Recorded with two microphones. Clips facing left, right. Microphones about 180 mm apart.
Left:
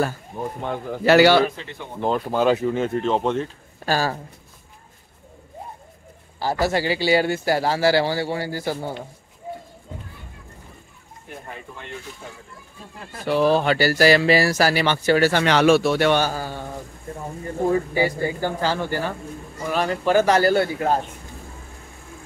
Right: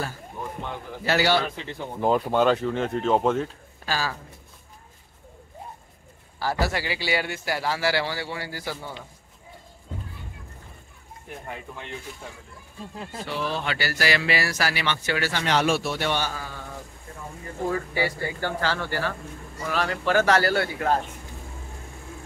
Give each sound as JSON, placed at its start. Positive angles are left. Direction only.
{"t": 0.4, "sound": "speech", "side_deg": 50}
{"t": 1.0, "sound": "speech", "side_deg": 70}
{"t": 2.0, "sound": "speech", "side_deg": -5}
{"t": 3.8, "sound": "speech", "side_deg": 50}
{"t": 6.6, "sound": "a man's voice", "side_deg": 30}
{"t": 13.4, "sound": "a man's voice", "side_deg": 40}
{"t": 15.4, "sound": "speech", "side_deg": 75}
{"t": 16.2, "sound": "a man's voice", "side_deg": 35}
{"t": 17.6, "sound": "speech", "side_deg": 20}